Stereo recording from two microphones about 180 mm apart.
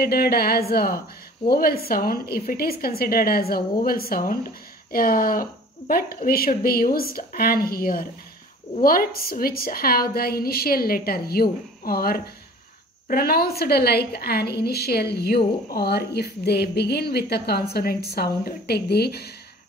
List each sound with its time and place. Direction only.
0.0 s a woman's voice: 60° left (ahead or behind)